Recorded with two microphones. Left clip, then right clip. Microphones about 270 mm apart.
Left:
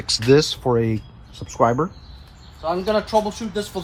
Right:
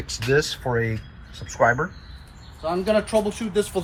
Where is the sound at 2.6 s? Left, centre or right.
Centre.